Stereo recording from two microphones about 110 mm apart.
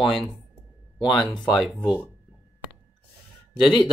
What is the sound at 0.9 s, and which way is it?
Speech, 45° left (ahead or behind).